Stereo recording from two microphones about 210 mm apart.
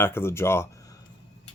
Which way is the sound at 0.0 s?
10° left (ahead or behind).